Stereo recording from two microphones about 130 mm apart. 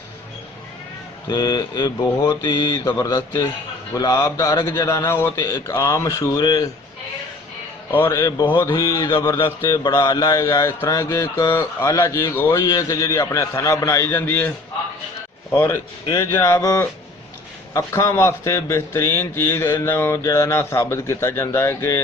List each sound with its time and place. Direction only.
1.3 s a man's voice: 30° left (ahead or behind)
7.9 s a man's voice: 20° left (ahead or behind)
12.6 s a man's voice: 30° left (ahead or behind)
15.5 s a man's voice: 20° left (ahead or behind)